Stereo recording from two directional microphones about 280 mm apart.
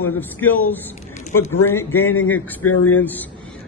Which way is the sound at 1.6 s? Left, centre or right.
Centre.